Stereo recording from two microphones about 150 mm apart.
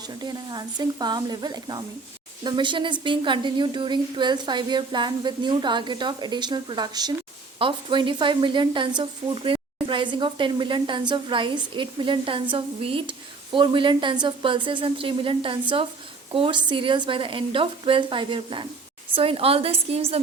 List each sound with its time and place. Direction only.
0.2 s a woman's voice: 30° right (ahead or behind)